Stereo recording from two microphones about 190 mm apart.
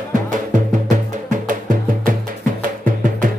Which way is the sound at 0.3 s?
40° right (ahead or behind).